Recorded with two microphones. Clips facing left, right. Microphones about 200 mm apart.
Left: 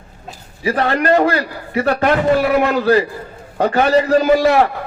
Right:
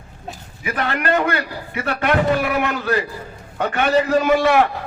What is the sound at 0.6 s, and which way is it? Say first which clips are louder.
A man's voice: left 6 dB; 35° left (ahead or behind).